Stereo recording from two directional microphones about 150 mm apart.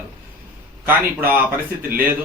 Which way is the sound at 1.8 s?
75° right (ahead or behind).